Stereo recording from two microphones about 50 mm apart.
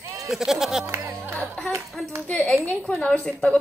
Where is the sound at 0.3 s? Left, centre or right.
Centre.